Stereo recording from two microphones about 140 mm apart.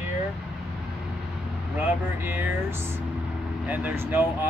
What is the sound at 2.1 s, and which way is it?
Speech, 15° right (ahead or behind).